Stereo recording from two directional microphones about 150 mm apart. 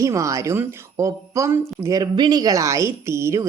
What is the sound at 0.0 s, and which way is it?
A woman's voice, 20° right (ahead or behind).